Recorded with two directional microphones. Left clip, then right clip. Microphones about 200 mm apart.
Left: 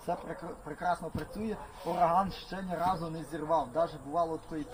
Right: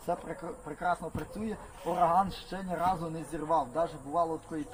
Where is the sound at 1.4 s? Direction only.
20° left (ahead or behind).